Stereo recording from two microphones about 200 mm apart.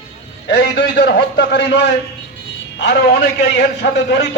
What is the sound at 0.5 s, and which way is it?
A man's voice, 60° left (ahead or behind).